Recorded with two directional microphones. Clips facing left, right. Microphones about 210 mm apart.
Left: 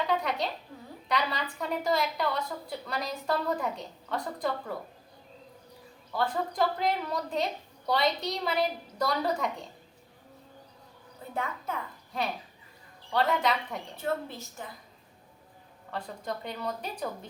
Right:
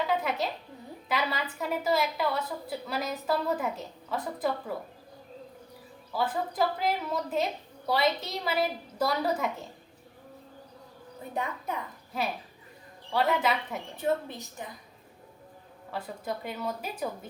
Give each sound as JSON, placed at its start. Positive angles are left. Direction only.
{"t": 0.1, "sound": "a sound", "side_deg": -5}
{"t": 1.0, "sound": "a woman's voice", "side_deg": -5}
{"t": 6.1, "sound": "a woman's voice", "side_deg": -5}
{"t": 11.3, "sound": "speech", "side_deg": -15}
{"t": 12.1, "sound": "a woman's voice", "side_deg": -5}
{"t": 13.9, "sound": "speech", "side_deg": -15}
{"t": 15.9, "sound": "speech", "side_deg": -5}